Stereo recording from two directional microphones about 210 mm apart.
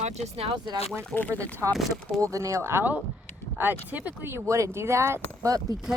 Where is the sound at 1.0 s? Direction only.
5° left (ahead or behind).